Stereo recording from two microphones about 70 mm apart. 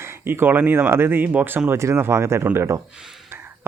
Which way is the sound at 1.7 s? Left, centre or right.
Right.